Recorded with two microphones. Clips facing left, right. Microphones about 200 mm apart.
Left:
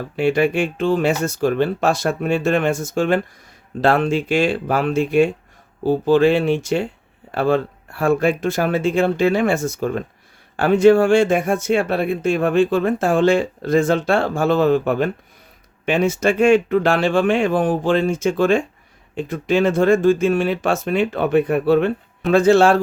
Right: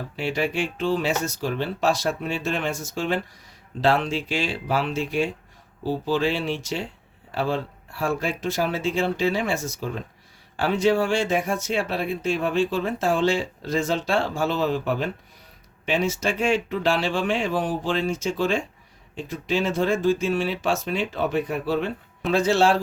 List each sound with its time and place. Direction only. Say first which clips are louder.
0.2 s speech: left 8 dB; 55° left (ahead or behind)